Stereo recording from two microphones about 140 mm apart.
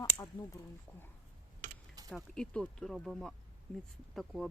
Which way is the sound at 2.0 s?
5° left (ahead or behind).